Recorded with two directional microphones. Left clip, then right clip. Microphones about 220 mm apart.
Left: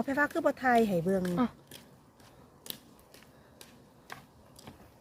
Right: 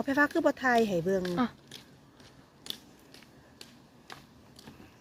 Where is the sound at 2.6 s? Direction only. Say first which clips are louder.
Right 4 dB; 55° left (ahead or behind).